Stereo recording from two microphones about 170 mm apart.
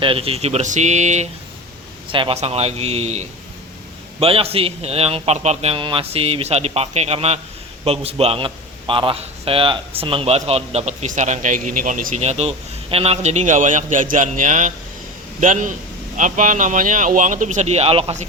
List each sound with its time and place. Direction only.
0.0 s a man's voice: 35° right (ahead or behind)
2.0 s a man's voice: 30° right (ahead or behind)